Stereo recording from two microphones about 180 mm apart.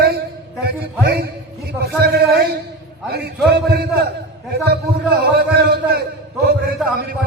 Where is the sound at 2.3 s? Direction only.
60° right (ahead or behind).